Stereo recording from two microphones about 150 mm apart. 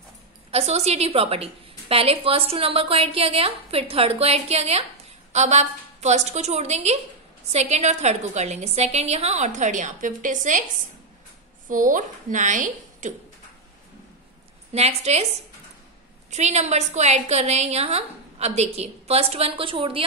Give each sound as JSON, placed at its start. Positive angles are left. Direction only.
{"t": 0.5, "sound": "a woman's voice", "side_deg": -45}
{"t": 11.7, "sound": "a woman's voice", "side_deg": -60}
{"t": 14.7, "sound": "a woman's voice", "side_deg": -45}
{"t": 16.3, "sound": "a woman's voice", "side_deg": -50}